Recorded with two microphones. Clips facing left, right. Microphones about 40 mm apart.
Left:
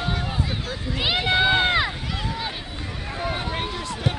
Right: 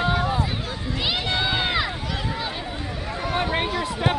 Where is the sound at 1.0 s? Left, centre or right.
Centre.